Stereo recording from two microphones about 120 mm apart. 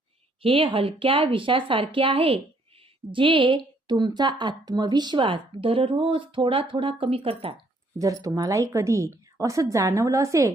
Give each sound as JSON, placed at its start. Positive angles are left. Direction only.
{"t": 0.4, "sound": "speech", "side_deg": -50}
{"t": 7.9, "sound": "speech", "side_deg": -30}